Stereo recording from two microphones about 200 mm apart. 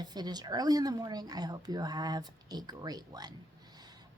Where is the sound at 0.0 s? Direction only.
20° right (ahead or behind).